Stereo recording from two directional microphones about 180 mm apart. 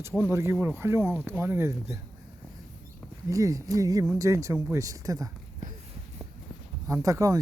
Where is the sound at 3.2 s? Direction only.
20° right (ahead or behind).